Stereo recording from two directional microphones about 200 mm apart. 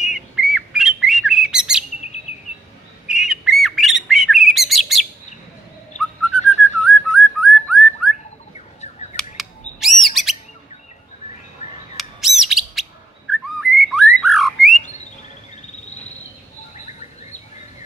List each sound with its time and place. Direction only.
0.0 s bird: 5° right (ahead or behind)
3.1 s bird: 5° right (ahead or behind)
6.8 s whistling: centre (ahead or behind)
9.1 s bird: centre (ahead or behind)
11.6 s bird: 35° left (ahead or behind)
12.0 s bird: centre (ahead or behind)
13.3 s whistling: centre (ahead or behind)
16.7 s bird: 35° left (ahead or behind)